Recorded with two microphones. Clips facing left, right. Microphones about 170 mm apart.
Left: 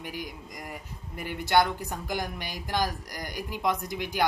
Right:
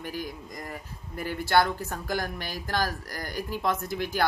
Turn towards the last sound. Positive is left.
turn(degrees=15)  # may be behind; listen again after turning